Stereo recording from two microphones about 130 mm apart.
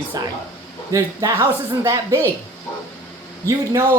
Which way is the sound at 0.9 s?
25° right (ahead or behind).